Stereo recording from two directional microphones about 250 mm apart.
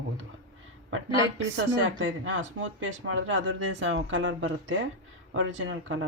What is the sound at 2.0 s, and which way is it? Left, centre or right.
Speech, right.